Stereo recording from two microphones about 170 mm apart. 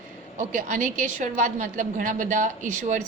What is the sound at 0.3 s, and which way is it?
A woman's voice, 50° right (ahead or behind).